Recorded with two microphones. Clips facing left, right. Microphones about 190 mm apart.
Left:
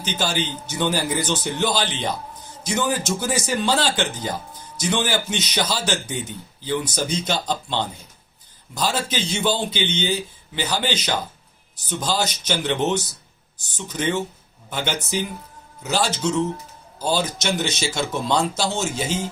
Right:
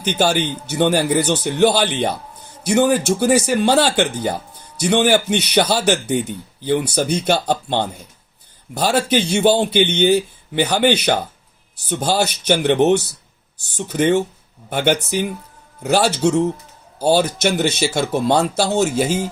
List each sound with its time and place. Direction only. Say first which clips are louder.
0.2 s speech: right 8 dB; 60° right (ahead or behind)